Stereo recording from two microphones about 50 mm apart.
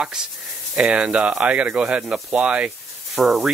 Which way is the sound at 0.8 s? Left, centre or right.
Right.